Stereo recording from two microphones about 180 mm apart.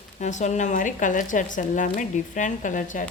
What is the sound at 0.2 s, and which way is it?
Speech, 40° left (ahead or behind).